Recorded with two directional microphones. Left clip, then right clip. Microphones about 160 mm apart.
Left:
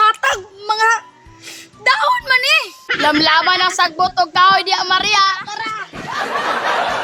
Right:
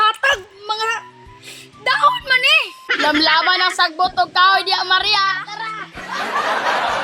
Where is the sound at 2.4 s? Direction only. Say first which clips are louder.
Even; centre (ahead or behind).